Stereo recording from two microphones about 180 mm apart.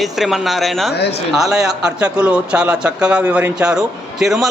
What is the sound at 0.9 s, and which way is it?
Speech, 65° left (ahead or behind).